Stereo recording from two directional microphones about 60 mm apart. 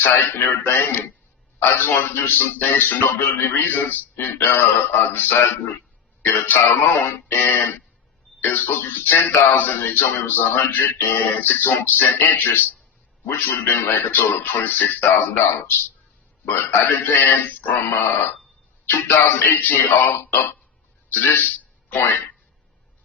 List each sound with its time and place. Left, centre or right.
0.0 s speech: left